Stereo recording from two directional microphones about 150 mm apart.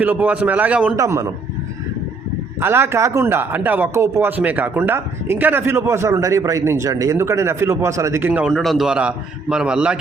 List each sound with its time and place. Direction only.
0.0 s speech: 10° right (ahead or behind)
0.9 s a man's voice: 20° right (ahead or behind)
2.6 s speech: 15° right (ahead or behind)
8.3 s a man's voice: 10° right (ahead or behind)